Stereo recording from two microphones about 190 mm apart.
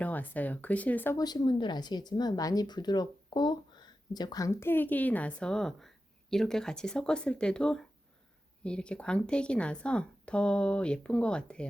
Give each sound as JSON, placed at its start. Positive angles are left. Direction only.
{"t": 0.0, "sound": "speech", "side_deg": 10}